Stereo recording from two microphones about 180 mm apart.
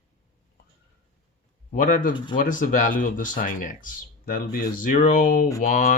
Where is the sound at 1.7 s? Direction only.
45° left (ahead or behind).